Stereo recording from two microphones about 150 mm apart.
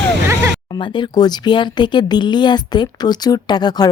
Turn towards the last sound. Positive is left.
turn(degrees=30)  # may be behind; listen again after turning